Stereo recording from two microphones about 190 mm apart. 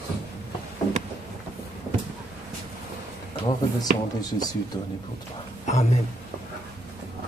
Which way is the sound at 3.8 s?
20° left (ahead or behind).